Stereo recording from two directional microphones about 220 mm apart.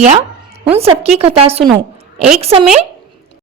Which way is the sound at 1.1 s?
25° right (ahead or behind).